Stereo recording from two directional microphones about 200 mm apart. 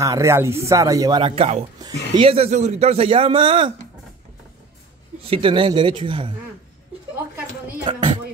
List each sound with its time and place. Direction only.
0.0 s a man's voice: 15° right (ahead or behind)
5.3 s a man's voice: 25° right (ahead or behind)
7.9 s a man's voice: 25° right (ahead or behind)